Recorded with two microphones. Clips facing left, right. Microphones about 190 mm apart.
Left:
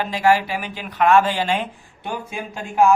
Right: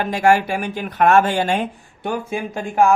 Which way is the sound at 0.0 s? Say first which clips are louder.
Right 2 dB; 50° right (ahead or behind).